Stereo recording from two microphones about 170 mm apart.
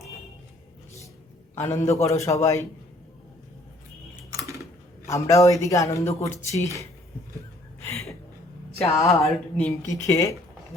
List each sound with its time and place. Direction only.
1.5 s a man's voice: 15° left (ahead or behind)
4.3 s typing: 20° right (ahead or behind)
5.0 s a man's voice: 20° left (ahead or behind)
8.9 s a man's voice: 20° left (ahead or behind)